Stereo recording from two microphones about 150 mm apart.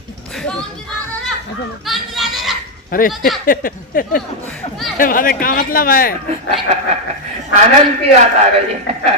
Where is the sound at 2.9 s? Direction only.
70° left (ahead or behind).